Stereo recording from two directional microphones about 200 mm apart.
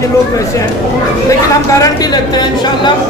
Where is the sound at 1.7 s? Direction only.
20° left (ahead or behind).